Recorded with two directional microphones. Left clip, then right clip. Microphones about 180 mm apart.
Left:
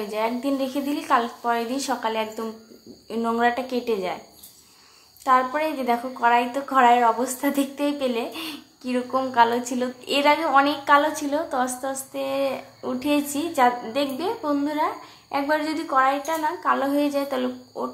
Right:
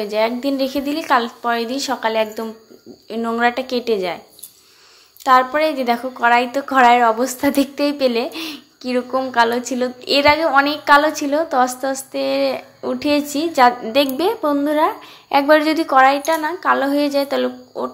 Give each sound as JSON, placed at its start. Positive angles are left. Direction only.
{"t": 0.0, "sound": "a woman's voice", "side_deg": -20}
{"t": 5.2, "sound": "a woman's voice", "side_deg": -25}